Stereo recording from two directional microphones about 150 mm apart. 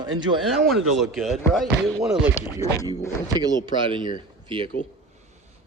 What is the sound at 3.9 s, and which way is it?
Speech, 30° right (ahead or behind).